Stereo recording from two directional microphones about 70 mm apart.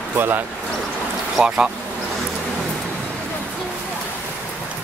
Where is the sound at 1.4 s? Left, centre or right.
Centre.